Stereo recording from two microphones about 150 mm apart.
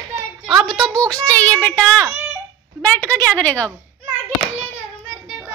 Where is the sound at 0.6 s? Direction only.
Centre (ahead or behind).